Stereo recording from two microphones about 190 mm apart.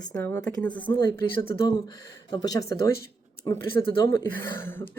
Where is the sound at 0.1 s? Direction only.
10° left (ahead or behind).